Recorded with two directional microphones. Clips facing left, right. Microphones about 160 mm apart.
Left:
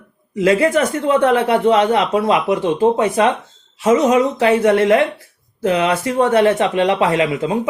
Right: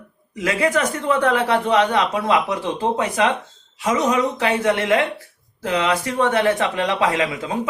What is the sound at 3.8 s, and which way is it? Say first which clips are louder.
Speech: left 6 dB; 30° left (ahead or behind).